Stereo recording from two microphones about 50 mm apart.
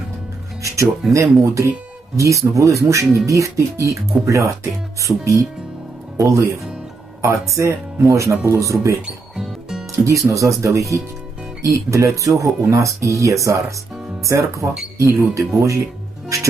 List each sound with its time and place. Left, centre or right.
1.1 s speech: right
9.0 s music: centre
9.9 s speech: right